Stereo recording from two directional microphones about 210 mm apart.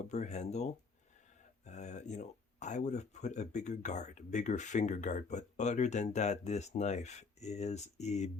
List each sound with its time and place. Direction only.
0.0 s speech: 35° left (ahead or behind)